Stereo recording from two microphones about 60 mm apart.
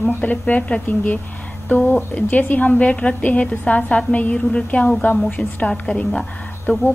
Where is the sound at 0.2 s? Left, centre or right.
Left.